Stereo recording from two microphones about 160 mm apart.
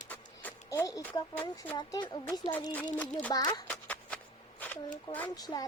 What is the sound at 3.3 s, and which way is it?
Speech, 25° left (ahead or behind).